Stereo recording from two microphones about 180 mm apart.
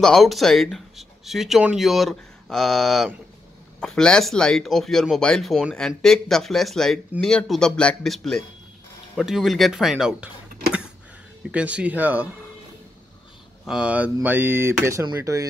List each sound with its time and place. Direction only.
0.0 s speech: centre (ahead or behind)
11.5 s speech: 5° right (ahead or behind)
13.7 s speech: 5° right (ahead or behind)